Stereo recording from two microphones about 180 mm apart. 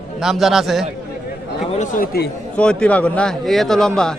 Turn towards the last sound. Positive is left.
turn(degrees=5)  # may be behind; listen again after turning